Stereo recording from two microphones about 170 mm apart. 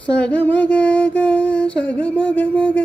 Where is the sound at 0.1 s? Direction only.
10° left (ahead or behind).